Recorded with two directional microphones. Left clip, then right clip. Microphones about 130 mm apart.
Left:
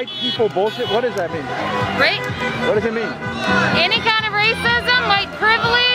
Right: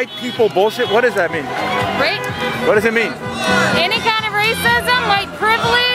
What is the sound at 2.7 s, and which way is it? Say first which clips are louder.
Speech: right 5 dB; 45° right (ahead or behind).